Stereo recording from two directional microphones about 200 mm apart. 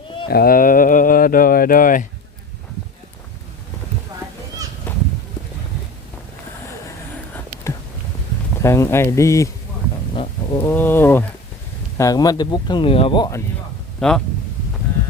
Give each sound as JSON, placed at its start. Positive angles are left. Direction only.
{"t": 0.3, "sound": "speech", "side_deg": 50}
{"t": 4.9, "sound": "goose", "side_deg": 10}
{"t": 8.6, "sound": "speech", "side_deg": 15}
{"t": 10.7, "sound": "speech", "side_deg": 10}
{"t": 14.0, "sound": "speech", "side_deg": 5}